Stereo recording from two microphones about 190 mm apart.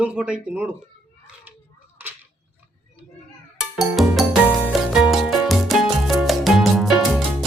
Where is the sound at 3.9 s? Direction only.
Centre (ahead or behind).